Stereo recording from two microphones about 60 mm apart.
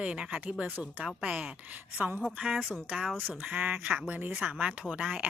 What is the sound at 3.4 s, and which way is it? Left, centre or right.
Speech, right.